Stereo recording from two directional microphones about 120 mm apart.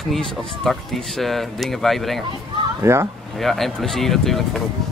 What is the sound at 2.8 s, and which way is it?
Speech, 20° right (ahead or behind).